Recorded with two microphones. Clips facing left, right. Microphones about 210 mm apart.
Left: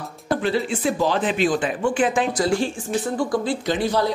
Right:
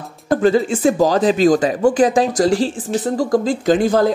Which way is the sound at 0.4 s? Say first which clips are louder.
Right 9 dB; 45° right (ahead or behind).